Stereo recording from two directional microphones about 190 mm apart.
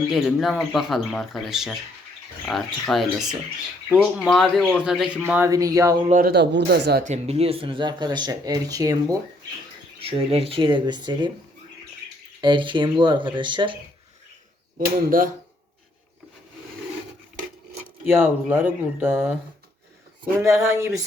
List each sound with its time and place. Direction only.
0.1 s speech: centre (ahead or behind); by 6.0 s 15° right (ahead or behind)
6.1 s speech: 50° right (ahead or behind)
7.0 s speech: 35° right (ahead or behind); by 9.1 s 20° right (ahead or behind)
10.0 s speech: 30° right (ahead or behind)
12.4 s speech: 25° right (ahead or behind)
14.8 s speech: 45° right (ahead or behind)
18.4 s speech: 10° right (ahead or behind)
19.1 s speech: centre (ahead or behind)
20.4 s speech: 15° right (ahead or behind)